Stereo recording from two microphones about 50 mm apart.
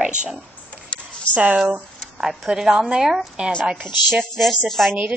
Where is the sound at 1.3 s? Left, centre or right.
Right.